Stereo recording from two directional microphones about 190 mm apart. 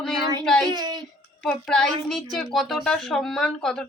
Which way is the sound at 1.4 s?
5° left (ahead or behind).